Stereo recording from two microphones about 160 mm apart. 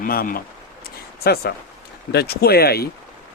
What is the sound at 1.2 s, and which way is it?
Speech, 80° left.